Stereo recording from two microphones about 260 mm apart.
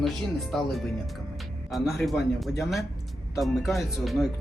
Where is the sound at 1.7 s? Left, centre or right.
Centre.